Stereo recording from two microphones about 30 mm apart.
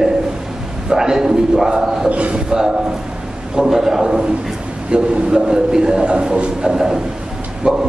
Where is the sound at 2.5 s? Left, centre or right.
Right.